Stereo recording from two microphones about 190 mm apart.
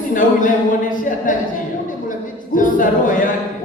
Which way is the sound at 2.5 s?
45° left (ahead or behind).